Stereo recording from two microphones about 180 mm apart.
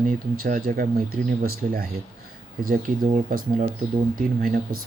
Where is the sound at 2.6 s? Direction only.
50° right (ahead or behind).